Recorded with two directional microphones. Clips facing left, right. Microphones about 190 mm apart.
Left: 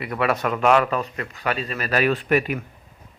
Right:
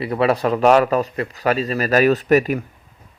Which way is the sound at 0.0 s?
30° right (ahead or behind).